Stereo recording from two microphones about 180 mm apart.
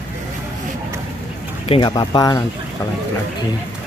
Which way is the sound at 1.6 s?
30° left (ahead or behind).